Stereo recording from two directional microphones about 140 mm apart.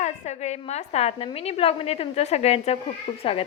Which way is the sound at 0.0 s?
55° left (ahead or behind).